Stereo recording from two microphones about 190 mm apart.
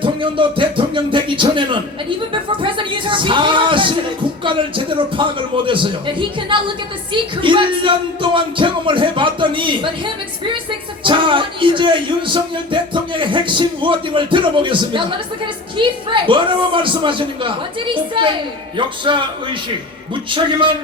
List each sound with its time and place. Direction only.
0.0 s a man's voice: 25° right (ahead or behind)
11.0 s a man's voice: 25° right (ahead or behind)
20.3 s a man's voice: 25° right (ahead or behind)